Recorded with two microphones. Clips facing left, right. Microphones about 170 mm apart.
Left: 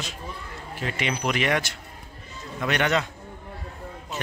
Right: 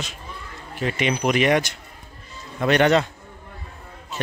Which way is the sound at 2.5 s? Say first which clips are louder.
Right 7 dB; 35° right (ahead or behind).